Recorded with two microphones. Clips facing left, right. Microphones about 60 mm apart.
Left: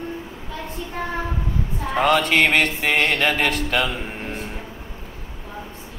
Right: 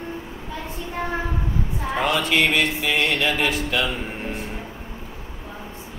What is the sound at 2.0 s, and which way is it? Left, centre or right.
Mantra, left.